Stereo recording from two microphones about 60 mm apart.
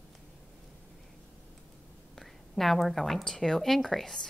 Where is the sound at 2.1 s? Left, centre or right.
Centre.